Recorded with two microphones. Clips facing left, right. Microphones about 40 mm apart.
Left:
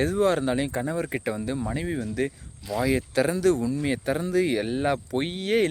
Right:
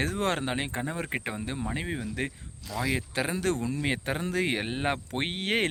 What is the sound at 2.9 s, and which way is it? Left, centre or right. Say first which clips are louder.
Speech: left 7 dB; right.